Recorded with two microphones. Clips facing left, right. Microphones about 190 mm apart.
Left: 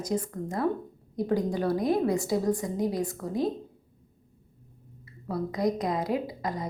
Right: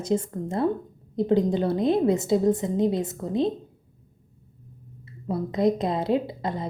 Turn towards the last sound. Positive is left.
turn(degrees=-25)  # may be behind; listen again after turning